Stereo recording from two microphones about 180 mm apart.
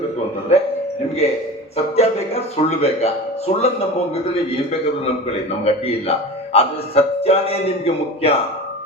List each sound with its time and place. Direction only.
0.5 s a sound: 40° left (ahead or behind)
1.7 s speech: 35° left (ahead or behind)
5.6 s speech: 35° left (ahead or behind)